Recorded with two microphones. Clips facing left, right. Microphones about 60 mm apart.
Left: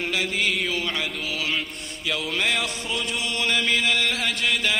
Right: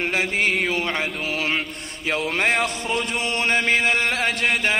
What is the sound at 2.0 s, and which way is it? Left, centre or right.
Music, right.